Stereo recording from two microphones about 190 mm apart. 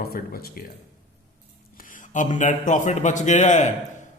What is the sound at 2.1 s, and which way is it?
A man's voice, 40° left (ahead or behind).